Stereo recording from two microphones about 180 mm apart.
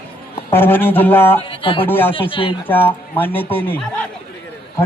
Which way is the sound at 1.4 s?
30° left (ahead or behind).